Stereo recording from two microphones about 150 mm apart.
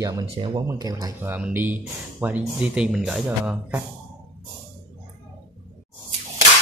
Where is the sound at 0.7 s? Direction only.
25° right (ahead or behind).